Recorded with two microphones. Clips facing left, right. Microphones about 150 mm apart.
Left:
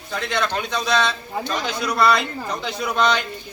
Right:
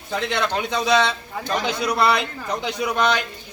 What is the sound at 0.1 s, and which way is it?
Speech, 15° right (ahead or behind).